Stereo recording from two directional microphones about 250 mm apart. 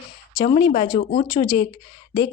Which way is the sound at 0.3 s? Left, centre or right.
Left.